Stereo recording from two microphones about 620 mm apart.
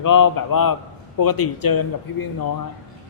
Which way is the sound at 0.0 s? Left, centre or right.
Left.